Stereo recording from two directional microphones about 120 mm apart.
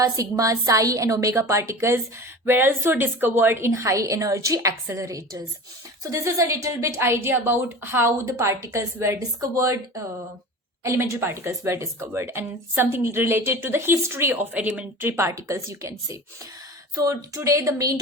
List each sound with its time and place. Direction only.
0.0 s speech: 30° right (ahead or behind)